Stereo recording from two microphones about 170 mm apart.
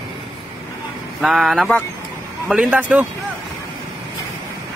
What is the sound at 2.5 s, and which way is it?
Speech, 5° right (ahead or behind).